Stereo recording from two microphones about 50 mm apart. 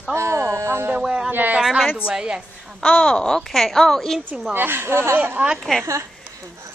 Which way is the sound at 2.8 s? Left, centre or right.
Left.